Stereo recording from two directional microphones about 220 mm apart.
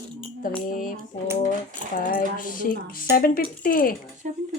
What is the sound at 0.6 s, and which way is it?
Speech, 40° left (ahead or behind).